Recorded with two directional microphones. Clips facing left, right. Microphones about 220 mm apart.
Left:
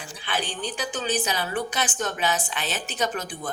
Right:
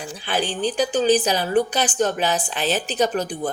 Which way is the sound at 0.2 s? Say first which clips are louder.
Right 7 dB; 35° right (ahead or behind).